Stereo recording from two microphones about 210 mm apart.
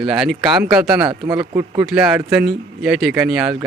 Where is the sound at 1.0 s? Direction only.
20° right (ahead or behind).